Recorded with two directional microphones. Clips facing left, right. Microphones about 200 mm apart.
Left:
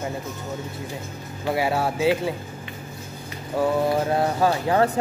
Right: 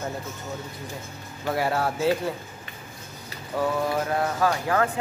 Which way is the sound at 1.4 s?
10° left (ahead or behind).